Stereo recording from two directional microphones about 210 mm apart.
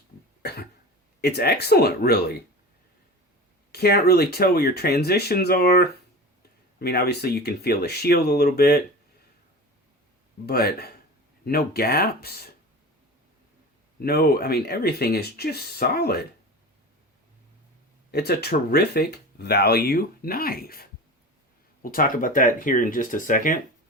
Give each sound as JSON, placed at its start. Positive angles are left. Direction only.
{"t": 0.4, "sound": "cough", "side_deg": 50}
{"t": 1.2, "sound": "speech", "side_deg": 50}
{"t": 3.7, "sound": "speech", "side_deg": 50}
{"t": 10.4, "sound": "speech", "side_deg": 45}
{"t": 14.0, "sound": "speech", "side_deg": 50}
{"t": 18.1, "sound": "speech", "side_deg": 50}